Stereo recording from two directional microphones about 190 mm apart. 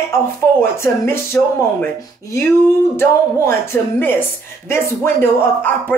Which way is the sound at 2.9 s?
15° left (ahead or behind).